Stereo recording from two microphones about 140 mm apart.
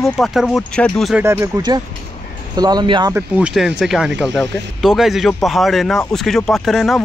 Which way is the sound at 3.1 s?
15° right (ahead or behind).